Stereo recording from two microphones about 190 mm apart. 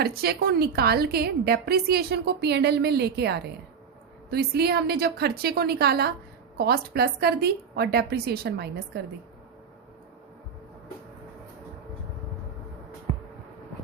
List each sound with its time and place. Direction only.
0.0 s a woman's voice: 55° right (ahead or behind)